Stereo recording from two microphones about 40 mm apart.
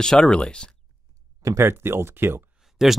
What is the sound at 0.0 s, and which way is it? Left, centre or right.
Speech, centre.